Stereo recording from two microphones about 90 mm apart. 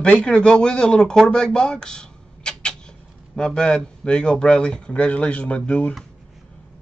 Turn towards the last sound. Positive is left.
turn(degrees=15)  # may be behind; listen again after turning